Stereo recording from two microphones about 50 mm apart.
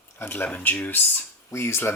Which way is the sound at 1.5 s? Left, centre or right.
Left.